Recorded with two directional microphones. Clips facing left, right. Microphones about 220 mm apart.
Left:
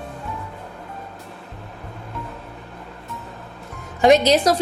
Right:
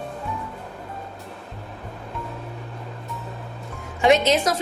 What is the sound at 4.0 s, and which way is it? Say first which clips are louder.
Music: left 3 dB; 40° left (ahead or behind).